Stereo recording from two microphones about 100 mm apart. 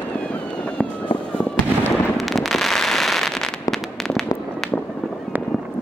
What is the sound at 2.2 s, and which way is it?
Fireworks, centre (ahead or behind).